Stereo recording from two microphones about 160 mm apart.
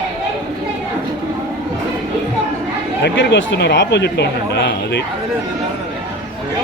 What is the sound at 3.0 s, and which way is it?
Speech, 90° left.